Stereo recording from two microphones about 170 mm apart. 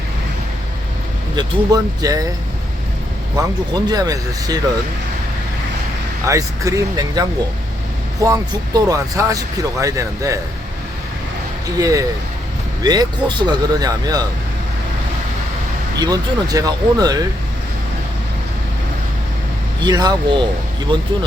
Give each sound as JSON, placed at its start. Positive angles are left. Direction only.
{"t": 1.4, "sound": "speech", "side_deg": -20}
{"t": 3.8, "sound": "speech", "side_deg": -25}
{"t": 6.2, "sound": "speech", "side_deg": -20}
{"t": 11.8, "sound": "speech", "side_deg": -20}
{"t": 16.0, "sound": "speech", "side_deg": -25}
{"t": 19.8, "sound": "speech", "side_deg": -25}